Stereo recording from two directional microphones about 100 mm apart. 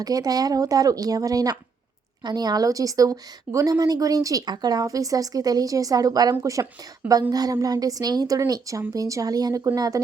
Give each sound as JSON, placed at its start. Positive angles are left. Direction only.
{"t": 0.0, "sound": "a woman's voice", "side_deg": -40}